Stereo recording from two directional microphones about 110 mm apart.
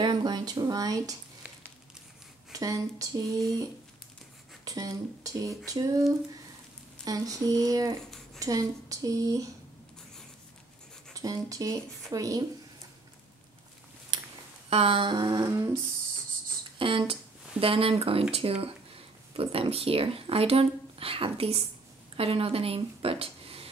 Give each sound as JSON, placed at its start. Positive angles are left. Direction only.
{"t": 0.0, "sound": "speech", "side_deg": -40}
{"t": 2.5, "sound": "speech", "side_deg": -30}
{"t": 4.6, "sound": "speech", "side_deg": -30}
{"t": 11.1, "sound": "speech", "side_deg": -30}
{"t": 14.1, "sound": "a sound", "side_deg": -40}
{"t": 14.7, "sound": "humming", "side_deg": -60}
{"t": 16.7, "sound": "a sound", "side_deg": -50}
{"t": 17.1, "sound": "speech", "side_deg": -60}